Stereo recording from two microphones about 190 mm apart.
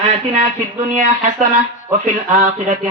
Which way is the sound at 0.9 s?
40° right (ahead or behind).